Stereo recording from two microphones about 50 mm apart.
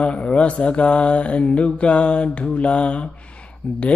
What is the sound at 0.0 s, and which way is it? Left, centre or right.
Mantra, left.